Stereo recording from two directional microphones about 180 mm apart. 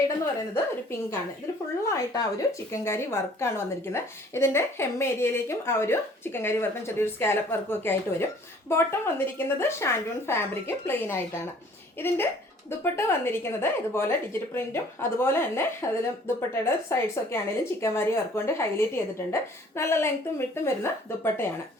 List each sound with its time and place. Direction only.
0.5 s a woman's voice: 15° left (ahead or behind)